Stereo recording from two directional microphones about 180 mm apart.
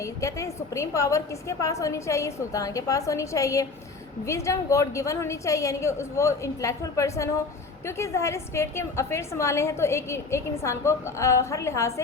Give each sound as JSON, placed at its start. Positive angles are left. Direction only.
{"t": 0.0, "sound": "a woman's voice", "side_deg": 15}